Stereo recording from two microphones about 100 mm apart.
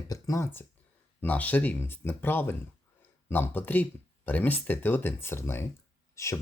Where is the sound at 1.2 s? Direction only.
15° left (ahead or behind).